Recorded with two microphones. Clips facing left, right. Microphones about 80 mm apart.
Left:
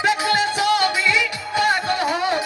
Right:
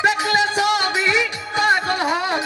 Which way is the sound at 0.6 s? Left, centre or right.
Right.